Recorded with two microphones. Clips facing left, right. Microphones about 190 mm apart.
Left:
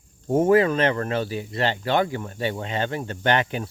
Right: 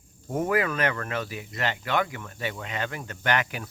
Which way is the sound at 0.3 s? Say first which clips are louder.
Left 8 dB; 30° left (ahead or behind).